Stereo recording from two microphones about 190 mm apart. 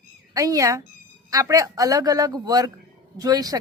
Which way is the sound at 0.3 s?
15° right (ahead or behind).